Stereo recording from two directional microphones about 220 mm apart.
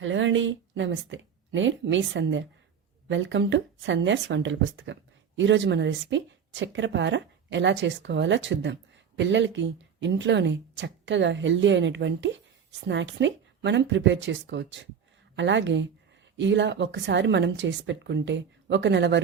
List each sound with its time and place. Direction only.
0.0 s speech: 60° right (ahead or behind)